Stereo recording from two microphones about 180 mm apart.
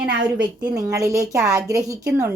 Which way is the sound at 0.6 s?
20° right (ahead or behind).